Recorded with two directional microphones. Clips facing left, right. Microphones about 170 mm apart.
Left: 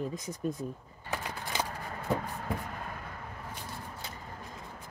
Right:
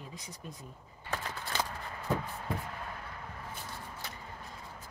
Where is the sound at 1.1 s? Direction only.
10° left (ahead or behind).